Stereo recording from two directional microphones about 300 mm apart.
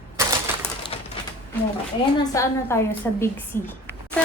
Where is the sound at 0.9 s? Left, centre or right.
Centre.